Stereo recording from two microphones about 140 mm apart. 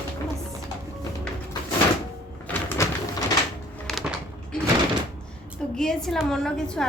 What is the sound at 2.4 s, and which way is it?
Door, 15° left (ahead or behind).